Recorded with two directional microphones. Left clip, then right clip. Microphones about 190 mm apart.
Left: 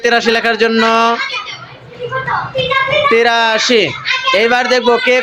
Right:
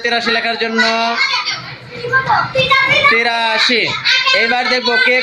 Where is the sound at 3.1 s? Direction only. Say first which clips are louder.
Left 3 dB; 40° left (ahead or behind).